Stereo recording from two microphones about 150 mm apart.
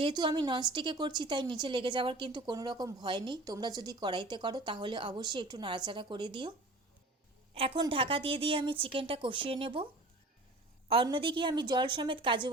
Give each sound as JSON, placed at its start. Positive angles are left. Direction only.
{"t": 0.0, "sound": "a woman's voice", "side_deg": -30}
{"t": 7.5, "sound": "a woman's voice", "side_deg": -40}